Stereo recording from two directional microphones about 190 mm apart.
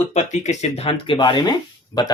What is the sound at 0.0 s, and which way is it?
Speech, 35° left (ahead or behind).